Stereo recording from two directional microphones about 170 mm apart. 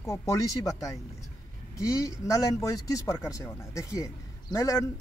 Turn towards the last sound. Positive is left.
turn(degrees=20)  # may be behind; listen again after turning